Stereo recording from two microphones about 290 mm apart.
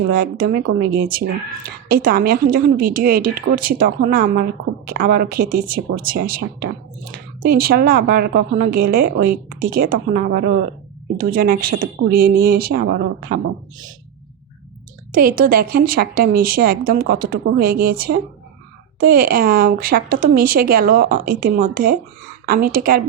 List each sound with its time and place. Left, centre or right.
0.1 s a woman's voice: right
15.1 s a woman's voice: right